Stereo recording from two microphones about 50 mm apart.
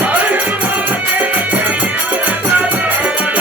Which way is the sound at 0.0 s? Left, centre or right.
Right.